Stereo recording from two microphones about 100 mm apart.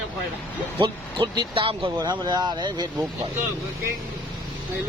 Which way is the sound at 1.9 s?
45° right (ahead or behind).